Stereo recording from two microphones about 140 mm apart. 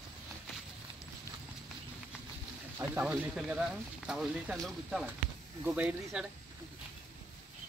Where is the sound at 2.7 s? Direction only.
15° right (ahead or behind).